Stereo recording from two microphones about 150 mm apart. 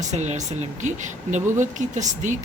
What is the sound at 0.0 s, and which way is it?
Speech, 50° right (ahead or behind).